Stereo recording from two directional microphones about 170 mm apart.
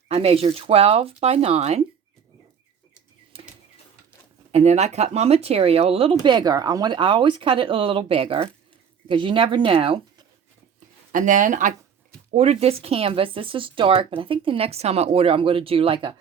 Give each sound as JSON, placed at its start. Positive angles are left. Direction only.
{"t": 0.1, "sound": "speech", "side_deg": -35}
{"t": 3.3, "sound": "a sound", "side_deg": -35}
{"t": 4.5, "sound": "speech", "side_deg": -40}
{"t": 11.1, "sound": "speech", "side_deg": -50}
{"t": 12.3, "sound": "speech", "side_deg": -40}